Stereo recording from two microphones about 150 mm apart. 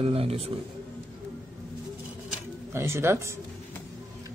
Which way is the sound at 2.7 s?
15° right (ahead or behind).